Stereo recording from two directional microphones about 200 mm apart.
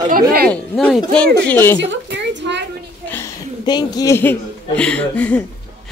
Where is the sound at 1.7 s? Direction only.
65° right (ahead or behind).